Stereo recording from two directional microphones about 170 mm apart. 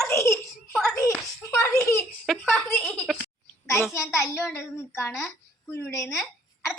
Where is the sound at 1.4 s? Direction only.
15° left (ahead or behind).